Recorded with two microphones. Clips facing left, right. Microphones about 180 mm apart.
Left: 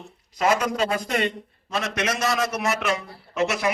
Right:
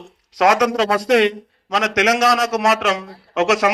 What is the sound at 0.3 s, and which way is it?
A man's voice, 90° right.